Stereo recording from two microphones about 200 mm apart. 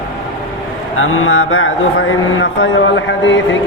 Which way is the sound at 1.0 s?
90° left.